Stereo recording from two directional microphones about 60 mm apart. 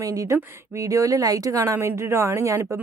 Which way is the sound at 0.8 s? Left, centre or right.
Right.